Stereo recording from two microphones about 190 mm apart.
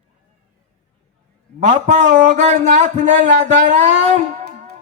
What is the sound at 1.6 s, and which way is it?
Speech, 40° right (ahead or behind).